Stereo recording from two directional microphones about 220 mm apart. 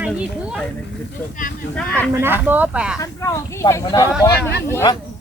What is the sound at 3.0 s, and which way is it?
Speech, 15° left (ahead or behind).